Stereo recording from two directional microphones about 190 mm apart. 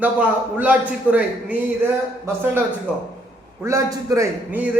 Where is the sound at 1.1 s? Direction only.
10° right (ahead or behind).